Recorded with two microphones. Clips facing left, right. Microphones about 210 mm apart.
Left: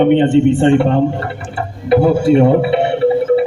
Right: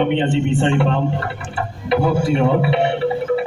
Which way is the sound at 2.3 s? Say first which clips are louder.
Left 6 dB; 40° left (ahead or behind).